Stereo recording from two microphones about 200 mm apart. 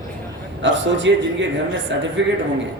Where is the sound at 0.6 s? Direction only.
65° right (ahead or behind).